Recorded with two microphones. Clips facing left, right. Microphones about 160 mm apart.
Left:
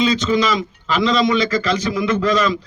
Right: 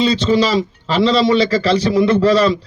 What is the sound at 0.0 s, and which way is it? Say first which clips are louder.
A man's voice: right 3 dB; 35° right (ahead or behind).